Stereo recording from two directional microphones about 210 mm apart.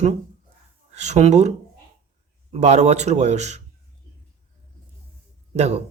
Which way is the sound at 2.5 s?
30° right (ahead or behind).